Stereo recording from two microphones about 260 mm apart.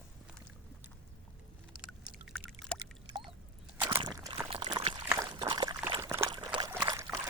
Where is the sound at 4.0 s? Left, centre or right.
Centre.